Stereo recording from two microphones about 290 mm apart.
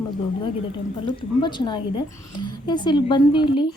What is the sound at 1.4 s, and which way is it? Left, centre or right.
A woman's voice, centre.